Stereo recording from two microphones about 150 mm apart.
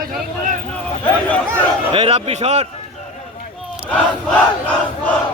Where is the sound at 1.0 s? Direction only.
10° left (ahead or behind).